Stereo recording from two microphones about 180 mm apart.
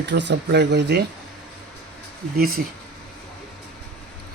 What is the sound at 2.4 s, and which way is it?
Speech, 55° right (ahead or behind).